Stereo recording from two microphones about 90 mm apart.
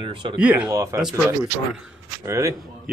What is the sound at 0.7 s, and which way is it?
Speech, 35° right (ahead or behind).